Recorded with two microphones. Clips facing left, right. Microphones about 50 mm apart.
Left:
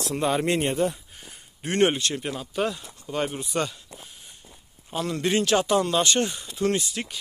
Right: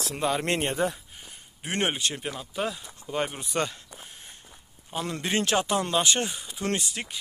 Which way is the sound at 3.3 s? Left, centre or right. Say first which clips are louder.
Left 1 dB; right.